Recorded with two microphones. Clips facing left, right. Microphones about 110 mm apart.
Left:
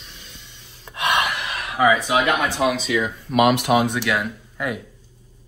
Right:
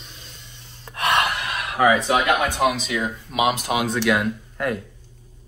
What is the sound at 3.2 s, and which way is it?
Speech, 55° left (ahead or behind).